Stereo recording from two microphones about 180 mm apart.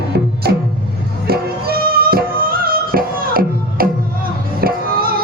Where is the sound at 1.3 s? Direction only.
60° right (ahead or behind).